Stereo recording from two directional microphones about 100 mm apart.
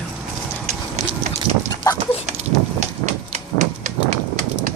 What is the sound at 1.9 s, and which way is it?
Dog, 35° left (ahead or behind).